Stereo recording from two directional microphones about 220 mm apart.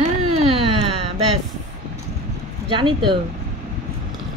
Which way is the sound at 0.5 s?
25° right (ahead or behind).